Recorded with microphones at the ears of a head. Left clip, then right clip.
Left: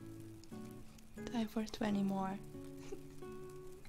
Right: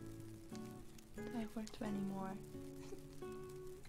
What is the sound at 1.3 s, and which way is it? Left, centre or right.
Speech, left.